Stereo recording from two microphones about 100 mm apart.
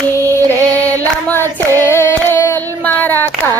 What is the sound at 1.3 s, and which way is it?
Child singing, 25° left (ahead or behind).